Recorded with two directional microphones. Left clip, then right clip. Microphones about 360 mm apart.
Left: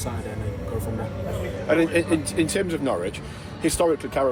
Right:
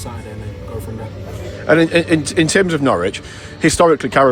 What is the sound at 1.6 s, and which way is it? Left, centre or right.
Speech, right.